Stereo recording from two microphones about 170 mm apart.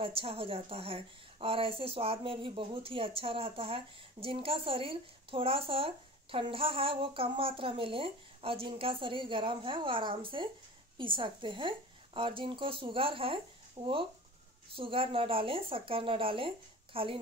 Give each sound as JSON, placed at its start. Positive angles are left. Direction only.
{"t": 0.0, "sound": "a woman's voice", "side_deg": -35}